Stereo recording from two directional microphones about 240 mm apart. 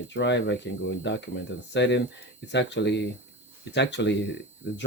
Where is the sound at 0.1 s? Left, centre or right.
Left.